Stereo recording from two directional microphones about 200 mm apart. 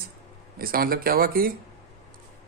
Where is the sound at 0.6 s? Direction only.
50° right (ahead or behind).